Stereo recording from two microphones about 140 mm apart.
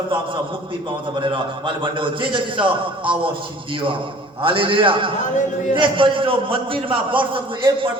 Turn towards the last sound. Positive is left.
turn(degrees=-35)  # may be behind; listen again after turning